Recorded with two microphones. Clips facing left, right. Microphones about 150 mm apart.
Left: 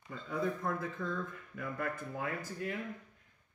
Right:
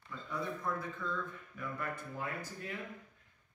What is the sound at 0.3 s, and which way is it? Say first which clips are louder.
Speech: left 3 dB; 50° left (ahead or behind).